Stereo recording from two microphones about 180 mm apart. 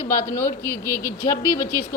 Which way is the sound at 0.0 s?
15° left (ahead or behind).